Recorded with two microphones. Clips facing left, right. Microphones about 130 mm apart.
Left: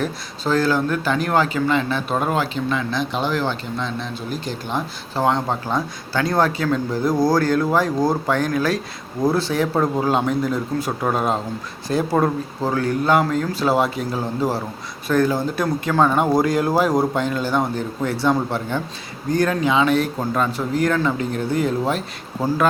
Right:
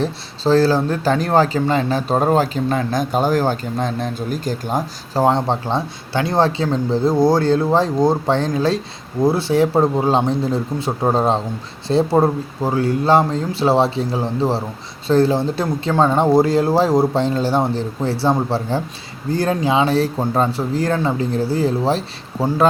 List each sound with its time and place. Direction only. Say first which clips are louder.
0.0 s speech: right 4 dB; 30° right (ahead or behind)